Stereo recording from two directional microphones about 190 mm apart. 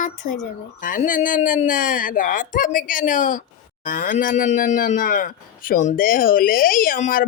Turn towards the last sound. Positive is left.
turn(degrees=45)  # may be behind; listen again after turning